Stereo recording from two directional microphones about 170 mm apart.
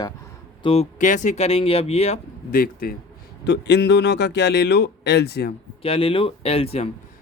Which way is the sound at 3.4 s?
90° left.